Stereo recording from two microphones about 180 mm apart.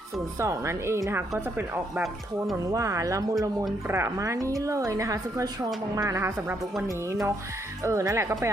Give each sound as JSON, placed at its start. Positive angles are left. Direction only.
{"t": 0.3, "sound": "a woman's voice", "side_deg": -15}